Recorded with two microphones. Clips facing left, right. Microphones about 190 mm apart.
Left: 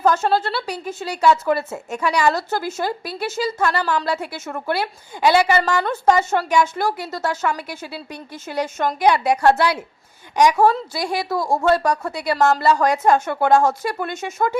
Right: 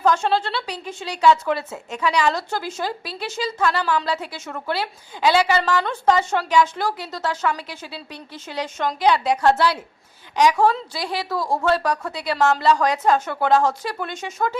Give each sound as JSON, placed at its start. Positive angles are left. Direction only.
{"t": 0.0, "sound": "a woman's voice", "side_deg": 5}
{"t": 11.0, "sound": "a woman's voice", "side_deg": 45}
{"t": 11.3, "sound": "a woman's voice", "side_deg": 10}